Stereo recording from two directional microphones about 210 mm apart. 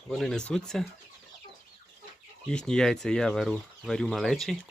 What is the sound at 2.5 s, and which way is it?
Speech, 5° left (ahead or behind).